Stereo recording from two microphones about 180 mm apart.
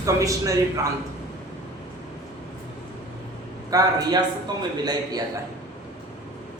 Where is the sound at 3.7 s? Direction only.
20° right (ahead or behind).